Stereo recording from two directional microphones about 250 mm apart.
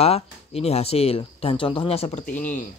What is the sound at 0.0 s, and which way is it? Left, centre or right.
Speech, left.